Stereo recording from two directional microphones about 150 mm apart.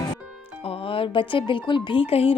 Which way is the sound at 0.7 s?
35° left (ahead or behind).